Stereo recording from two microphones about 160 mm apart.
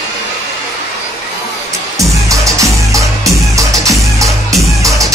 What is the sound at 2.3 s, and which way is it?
Music, 20° right (ahead or behind).